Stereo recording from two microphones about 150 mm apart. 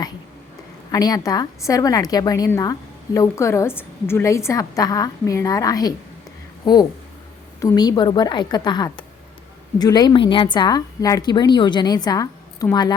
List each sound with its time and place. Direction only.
0.9 s a woman's voice: 25° left (ahead or behind)
7.6 s a woman's voice: 25° left (ahead or behind)